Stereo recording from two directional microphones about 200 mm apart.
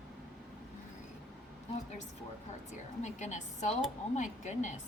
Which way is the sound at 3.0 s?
35° left (ahead or behind).